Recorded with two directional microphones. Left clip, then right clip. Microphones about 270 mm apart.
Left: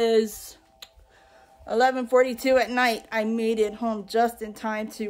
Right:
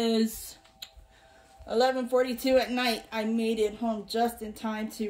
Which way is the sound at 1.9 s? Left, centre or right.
Centre.